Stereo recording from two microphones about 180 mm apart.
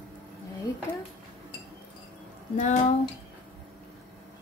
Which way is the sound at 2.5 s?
45° left (ahead or behind).